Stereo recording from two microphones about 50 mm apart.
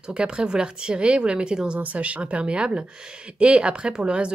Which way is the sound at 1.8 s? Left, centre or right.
Right.